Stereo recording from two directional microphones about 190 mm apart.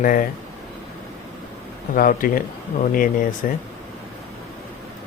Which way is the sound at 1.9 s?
45° left (ahead or behind).